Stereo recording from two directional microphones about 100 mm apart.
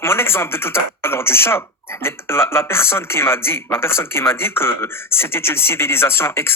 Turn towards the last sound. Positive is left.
turn(degrees=25)  # may be behind; listen again after turning